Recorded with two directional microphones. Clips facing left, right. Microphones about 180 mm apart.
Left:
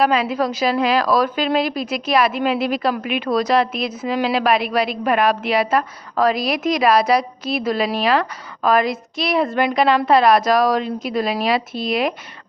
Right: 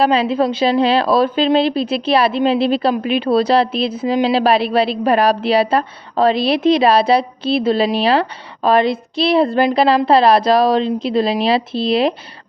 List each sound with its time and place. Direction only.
0.0 s a woman's voice: 30° right (ahead or behind)